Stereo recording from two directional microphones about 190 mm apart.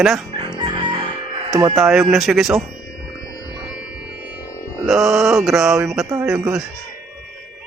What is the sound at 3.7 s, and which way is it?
Music, 5° right (ahead or behind).